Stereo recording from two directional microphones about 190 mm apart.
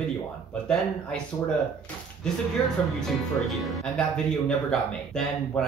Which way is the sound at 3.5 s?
Centre (ahead or behind).